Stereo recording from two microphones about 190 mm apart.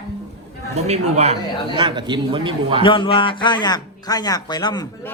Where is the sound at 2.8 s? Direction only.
25° left (ahead or behind).